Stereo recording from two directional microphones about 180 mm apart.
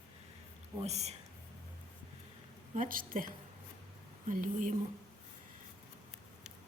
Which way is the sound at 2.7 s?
50° right (ahead or behind).